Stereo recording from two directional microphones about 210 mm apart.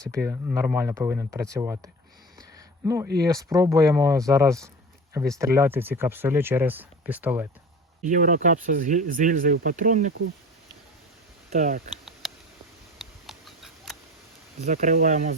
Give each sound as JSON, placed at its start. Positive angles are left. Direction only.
{"t": 0.3, "sound": "speech", "side_deg": -10}
{"t": 2.6, "sound": "a sound", "side_deg": -15}
{"t": 3.2, "sound": "speech", "side_deg": -15}
{"t": 8.0, "sound": "speech", "side_deg": -40}
{"t": 11.5, "sound": "speech", "side_deg": -35}
{"t": 12.2, "sound": "a sound", "side_deg": 0}
{"t": 14.6, "sound": "speech", "side_deg": -35}